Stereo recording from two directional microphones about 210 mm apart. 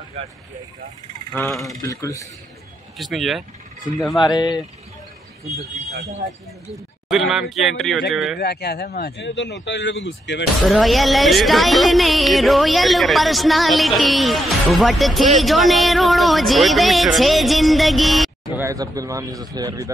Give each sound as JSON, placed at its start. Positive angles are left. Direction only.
{"t": 1.3, "sound": "a woman's voice", "side_deg": 5}
{"t": 1.8, "sound": "speech", "side_deg": 15}
{"t": 3.0, "sound": "a woman's voice", "side_deg": 0}
{"t": 4.2, "sound": "speech", "side_deg": 20}
{"t": 7.1, "sound": "a woman's voice", "side_deg": 0}
{"t": 8.4, "sound": "speech", "side_deg": 50}
{"t": 10.6, "sound": "a woman's voice", "side_deg": 0}
{"t": 18.6, "sound": "speech", "side_deg": -15}